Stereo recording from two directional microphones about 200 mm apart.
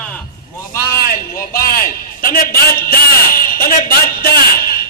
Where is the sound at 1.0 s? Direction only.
50° left (ahead or behind).